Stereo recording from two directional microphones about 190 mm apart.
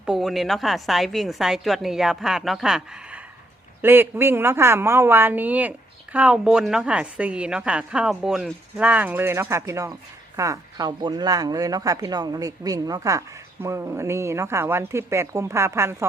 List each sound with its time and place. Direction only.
0.0 s a woman's voice: centre (ahead or behind)